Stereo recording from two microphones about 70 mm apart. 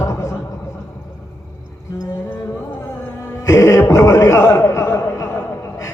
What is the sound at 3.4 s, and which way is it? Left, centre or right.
A man's voice, left.